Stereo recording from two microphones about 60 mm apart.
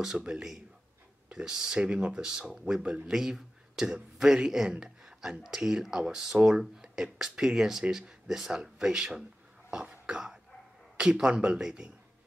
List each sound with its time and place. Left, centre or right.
0.0 s speech: centre
2.8 s speech: right
3.1 s speech: centre
4.6 s a sound: centre
5.4 s speech: centre
9.7 s cough: centre
11.0 s speech: centre